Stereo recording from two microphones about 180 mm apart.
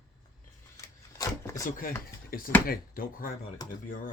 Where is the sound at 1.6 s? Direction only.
50° left (ahead or behind).